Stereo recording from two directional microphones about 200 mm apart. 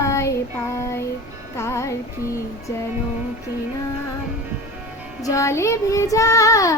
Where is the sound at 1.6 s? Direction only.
15° left (ahead or behind).